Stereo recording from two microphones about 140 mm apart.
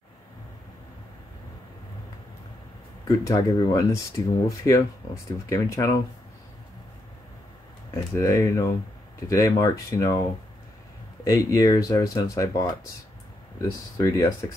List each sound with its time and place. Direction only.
3.1 s speech: 25° left (ahead or behind)
7.9 s speech: 20° left (ahead or behind)
11.2 s speech: 25° left (ahead or behind)